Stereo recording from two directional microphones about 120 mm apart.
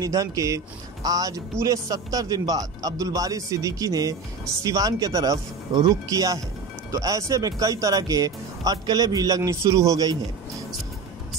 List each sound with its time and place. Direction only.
0.0 s speech: 30° right (ahead or behind)